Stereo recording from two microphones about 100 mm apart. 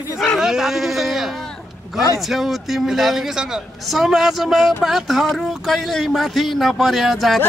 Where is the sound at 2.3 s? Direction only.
5° right (ahead or behind).